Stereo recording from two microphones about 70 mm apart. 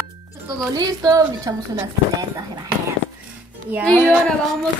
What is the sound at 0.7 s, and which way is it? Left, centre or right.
Speech, right.